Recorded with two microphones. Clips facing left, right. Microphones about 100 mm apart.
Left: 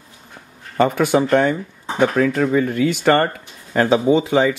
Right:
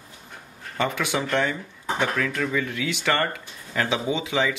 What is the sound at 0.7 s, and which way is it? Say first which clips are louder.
Speech: left 10 dB; 45° left (ahead or behind).